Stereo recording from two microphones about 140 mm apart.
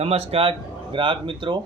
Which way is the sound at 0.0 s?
45° right (ahead or behind).